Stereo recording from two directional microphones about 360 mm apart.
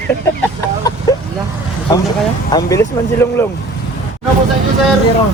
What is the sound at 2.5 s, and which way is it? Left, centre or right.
Speech, centre.